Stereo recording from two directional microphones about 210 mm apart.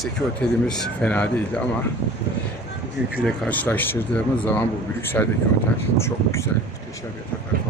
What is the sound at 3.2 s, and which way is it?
Speech, 5° left (ahead or behind).